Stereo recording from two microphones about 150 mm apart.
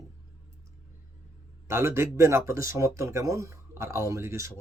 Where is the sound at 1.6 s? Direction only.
15° right (ahead or behind).